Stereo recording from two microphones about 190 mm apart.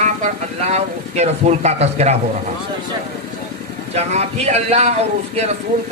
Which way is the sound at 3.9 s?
35° right (ahead or behind).